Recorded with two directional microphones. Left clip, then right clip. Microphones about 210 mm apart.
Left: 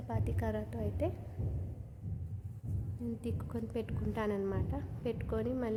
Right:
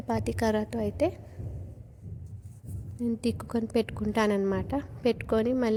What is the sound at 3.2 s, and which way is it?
A woman's voice, 45° right (ahead or behind).